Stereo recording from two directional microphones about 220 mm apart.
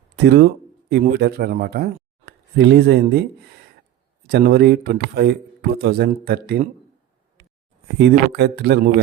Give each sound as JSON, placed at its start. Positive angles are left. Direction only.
{"t": 0.9, "sound": "speech", "side_deg": -45}
{"t": 4.3, "sound": "speech", "side_deg": -45}
{"t": 7.9, "sound": "speech", "side_deg": -50}